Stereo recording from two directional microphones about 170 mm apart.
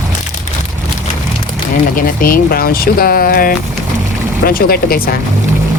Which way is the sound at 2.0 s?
55° left (ahead or behind).